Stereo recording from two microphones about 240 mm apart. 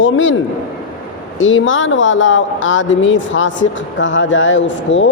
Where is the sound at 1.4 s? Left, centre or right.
Left.